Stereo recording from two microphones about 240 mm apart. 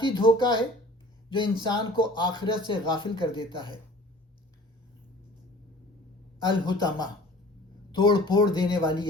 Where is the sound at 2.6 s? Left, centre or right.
Centre.